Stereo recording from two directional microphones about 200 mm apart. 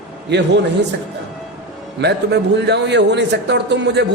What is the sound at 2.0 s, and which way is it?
A man's voice, 55° right (ahead or behind).